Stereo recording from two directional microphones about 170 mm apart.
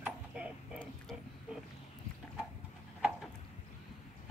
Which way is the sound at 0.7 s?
Centre (ahead or behind).